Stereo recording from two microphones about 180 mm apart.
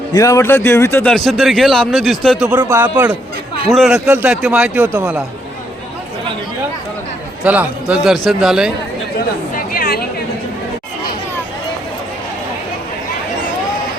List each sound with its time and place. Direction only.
0.1 s speech: 20° left (ahead or behind)
1.1 s speech: centre (ahead or behind)
2.5 s speech: 10° right (ahead or behind)
7.4 s speech: 10° right (ahead or behind)
9.6 s chatter: 55° left (ahead or behind)